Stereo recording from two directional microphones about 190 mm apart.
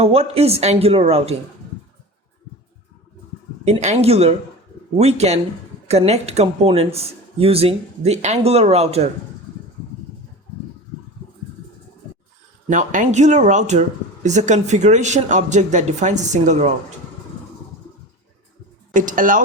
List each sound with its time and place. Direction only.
0.0 s a woman's voice: 30° right (ahead or behind)
3.7 s a woman's voice: 35° right (ahead or behind)
12.7 s a woman's voice: 40° right (ahead or behind)
18.9 s speech: 45° right (ahead or behind)